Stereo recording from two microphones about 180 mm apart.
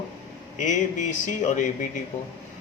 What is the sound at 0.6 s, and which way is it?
A man's voice, 45° left (ahead or behind).